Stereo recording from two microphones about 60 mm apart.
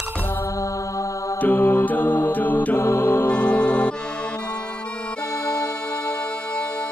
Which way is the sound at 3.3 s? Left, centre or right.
Left.